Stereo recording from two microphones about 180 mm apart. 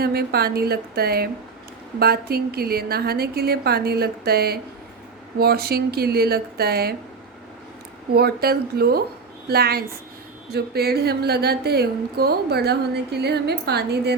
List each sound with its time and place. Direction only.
0.0 s speech: 60° right (ahead or behind)
8.1 s speech: 60° right (ahead or behind)